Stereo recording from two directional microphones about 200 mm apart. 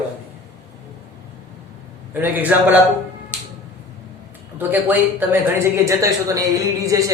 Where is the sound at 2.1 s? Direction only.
10° right (ahead or behind).